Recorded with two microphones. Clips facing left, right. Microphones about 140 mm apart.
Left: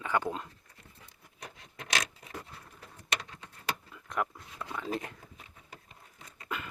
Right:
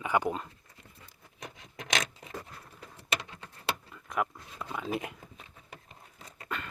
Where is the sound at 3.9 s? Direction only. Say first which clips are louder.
Right 1 dB; centre (ahead or behind).